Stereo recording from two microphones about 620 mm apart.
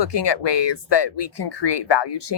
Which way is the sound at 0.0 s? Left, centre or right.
Left.